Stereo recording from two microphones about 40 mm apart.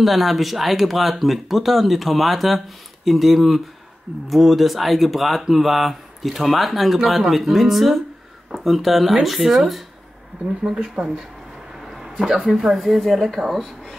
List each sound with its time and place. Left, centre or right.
0.0 s speech: centre
10.4 s speech: right
11.8 s a sound: centre
12.5 s speech: centre